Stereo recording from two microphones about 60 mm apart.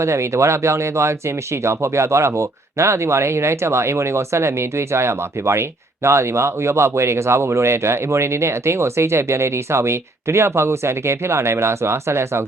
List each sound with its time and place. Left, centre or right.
0.0 s speech: right